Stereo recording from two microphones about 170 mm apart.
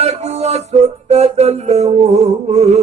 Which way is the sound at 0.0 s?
40° right (ahead or behind).